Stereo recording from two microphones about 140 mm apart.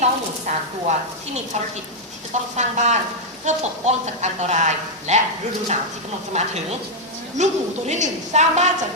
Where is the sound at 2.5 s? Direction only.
55° right (ahead or behind).